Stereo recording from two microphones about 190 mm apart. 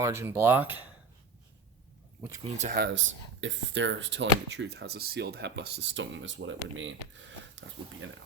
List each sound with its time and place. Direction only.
0.0 s speech: 15° right (ahead or behind)
2.4 s speech: 35° right (ahead or behind)
2.7 s speech: 65° right (ahead or behind)